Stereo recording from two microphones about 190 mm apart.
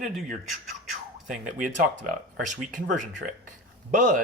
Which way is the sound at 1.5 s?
45° right (ahead or behind).